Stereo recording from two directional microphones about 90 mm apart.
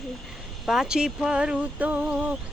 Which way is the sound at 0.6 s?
5° right (ahead or behind).